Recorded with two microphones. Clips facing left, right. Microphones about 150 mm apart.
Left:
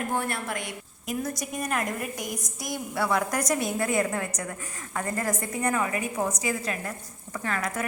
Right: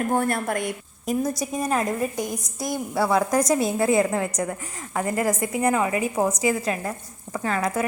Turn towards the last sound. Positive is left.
turn(degrees=-30)  # may be behind; listen again after turning